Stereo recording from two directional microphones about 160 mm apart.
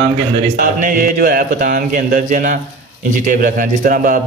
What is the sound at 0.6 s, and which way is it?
A man's voice, 60° right (ahead or behind).